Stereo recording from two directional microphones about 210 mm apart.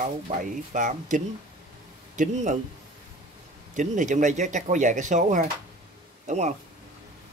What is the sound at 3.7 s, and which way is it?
Speech, 35° right (ahead or behind).